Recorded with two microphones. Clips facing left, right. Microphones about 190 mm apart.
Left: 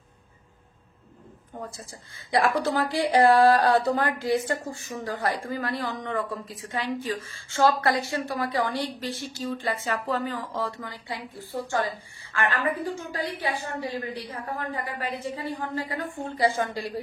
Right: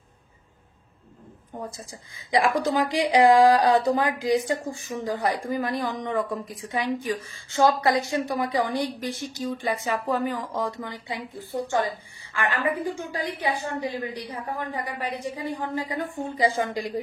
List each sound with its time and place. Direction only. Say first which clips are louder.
1.6 s a woman's voice: right 2 dB; 15° right (ahead or behind)
13.1 s a woman's voice: right 2 dB; 15° right (ahead or behind)